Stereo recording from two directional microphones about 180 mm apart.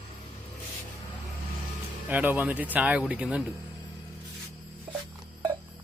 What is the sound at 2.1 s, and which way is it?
Speech, 10° right (ahead or behind).